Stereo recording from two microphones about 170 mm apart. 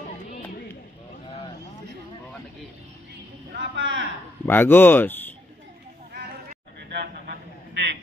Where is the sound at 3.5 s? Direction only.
90° right.